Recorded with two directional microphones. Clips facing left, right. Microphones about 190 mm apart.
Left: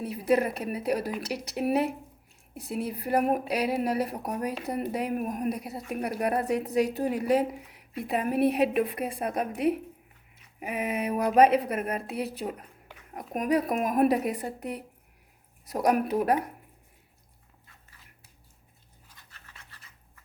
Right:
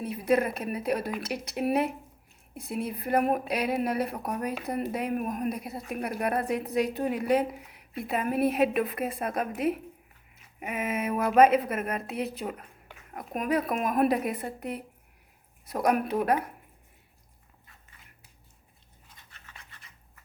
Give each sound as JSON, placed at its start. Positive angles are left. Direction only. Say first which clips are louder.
{"t": 0.0, "sound": "a woman's voice", "louder": "even", "side_deg": 35}
{"t": 10.6, "sound": "a woman's voice", "louder": "left 1 dB", "side_deg": 35}
{"t": 19.3, "sound": "scratch", "louder": "right 1 dB", "side_deg": 35}